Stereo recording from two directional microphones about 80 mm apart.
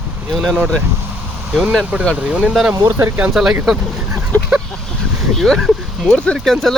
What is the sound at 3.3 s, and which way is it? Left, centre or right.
Speech, centre.